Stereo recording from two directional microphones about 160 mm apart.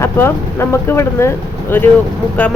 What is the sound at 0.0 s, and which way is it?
Speech, 15° left (ahead or behind).